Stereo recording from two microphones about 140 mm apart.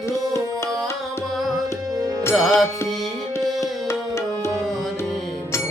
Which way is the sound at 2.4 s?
Centre (ahead or behind).